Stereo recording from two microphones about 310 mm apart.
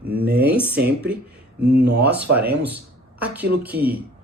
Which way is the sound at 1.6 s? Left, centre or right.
Right.